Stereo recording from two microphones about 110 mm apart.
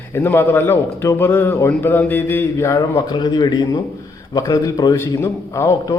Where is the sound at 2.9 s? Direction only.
40° left (ahead or behind).